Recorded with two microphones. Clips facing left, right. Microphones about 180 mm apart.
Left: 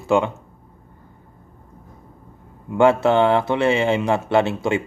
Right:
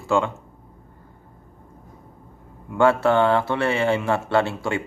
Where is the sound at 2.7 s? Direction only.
20° left (ahead or behind).